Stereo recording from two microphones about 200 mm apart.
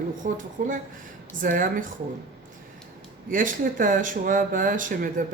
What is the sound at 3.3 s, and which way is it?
Speech, 40° right (ahead or behind).